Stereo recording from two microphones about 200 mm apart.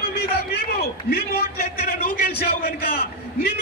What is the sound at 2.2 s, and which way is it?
Speech, 50° left (ahead or behind).